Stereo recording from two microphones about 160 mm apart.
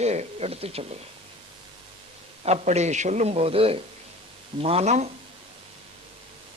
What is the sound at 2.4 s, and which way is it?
A man's voice, 40° right (ahead or behind).